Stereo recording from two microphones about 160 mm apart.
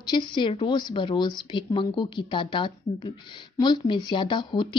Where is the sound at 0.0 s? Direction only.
30° left (ahead or behind).